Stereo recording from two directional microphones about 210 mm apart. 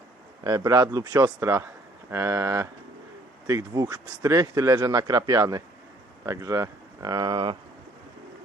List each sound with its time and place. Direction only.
0.4 s speech: 15° right (ahead or behind)